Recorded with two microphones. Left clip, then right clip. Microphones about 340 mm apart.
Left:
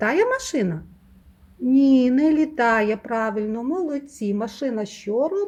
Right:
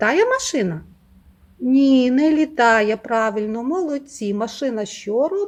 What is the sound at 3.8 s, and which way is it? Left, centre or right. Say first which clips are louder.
Speech: right 3 dB; centre.